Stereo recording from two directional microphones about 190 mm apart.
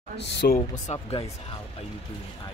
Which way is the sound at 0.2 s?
65° left (ahead or behind).